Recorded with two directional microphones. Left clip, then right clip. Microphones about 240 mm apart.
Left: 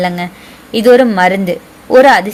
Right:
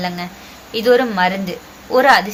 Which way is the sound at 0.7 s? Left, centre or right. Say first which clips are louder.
Left 7 dB; left.